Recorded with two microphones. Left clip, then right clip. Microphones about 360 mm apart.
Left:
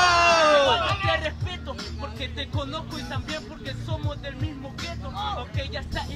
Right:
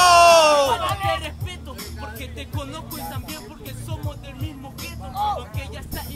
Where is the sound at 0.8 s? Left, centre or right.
Centre.